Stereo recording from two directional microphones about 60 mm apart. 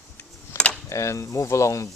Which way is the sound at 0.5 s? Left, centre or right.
Left.